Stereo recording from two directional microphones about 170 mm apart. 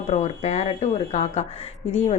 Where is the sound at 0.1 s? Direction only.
45° left (ahead or behind).